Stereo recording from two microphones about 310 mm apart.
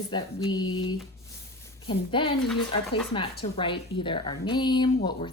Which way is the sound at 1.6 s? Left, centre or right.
Centre.